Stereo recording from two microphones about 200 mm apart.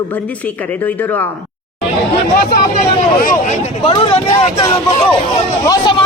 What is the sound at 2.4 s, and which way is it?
Speech, 45° left (ahead or behind).